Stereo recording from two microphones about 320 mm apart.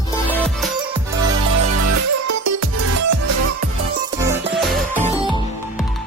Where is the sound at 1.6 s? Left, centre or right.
Right.